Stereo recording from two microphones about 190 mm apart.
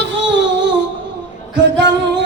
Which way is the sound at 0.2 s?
70° right (ahead or behind).